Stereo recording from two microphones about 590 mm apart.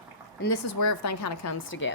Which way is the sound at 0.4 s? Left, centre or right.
Left.